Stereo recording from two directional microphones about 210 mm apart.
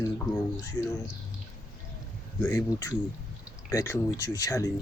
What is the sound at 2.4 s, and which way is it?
Speech, 10° left (ahead or behind).